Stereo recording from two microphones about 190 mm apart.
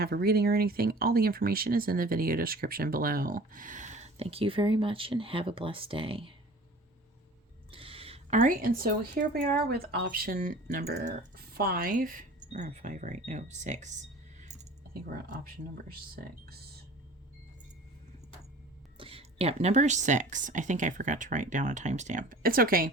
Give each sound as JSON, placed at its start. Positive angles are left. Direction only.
{"t": 0.0, "sound": "speech", "side_deg": -55}
{"t": 7.7, "sound": "a sound", "side_deg": -30}
{"t": 8.4, "sound": "speech", "side_deg": -45}
{"t": 11.5, "sound": "speech", "side_deg": -50}
{"t": 16.2, "sound": "speech", "side_deg": -50}
{"t": 18.9, "sound": "speech", "side_deg": -30}